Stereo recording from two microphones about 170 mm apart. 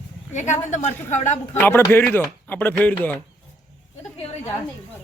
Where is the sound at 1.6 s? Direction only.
15° left (ahead or behind).